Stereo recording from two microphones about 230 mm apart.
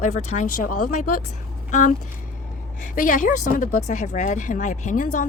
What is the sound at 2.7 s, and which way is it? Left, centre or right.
Speech, left.